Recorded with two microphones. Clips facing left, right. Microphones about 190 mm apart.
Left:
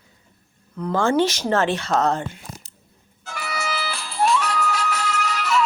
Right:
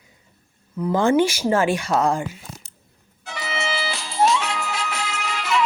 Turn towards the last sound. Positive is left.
turn(degrees=-25)  # may be behind; listen again after turning